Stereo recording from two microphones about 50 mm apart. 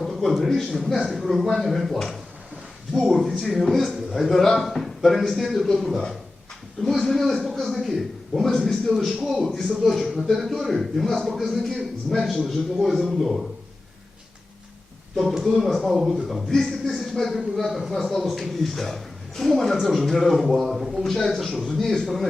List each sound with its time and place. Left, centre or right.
0.0 s a man's voice: centre
3.2 s speech: centre
7.0 s speech: centre
15.1 s speech: centre
16.5 s speech: centre
21.0 s a man's voice: centre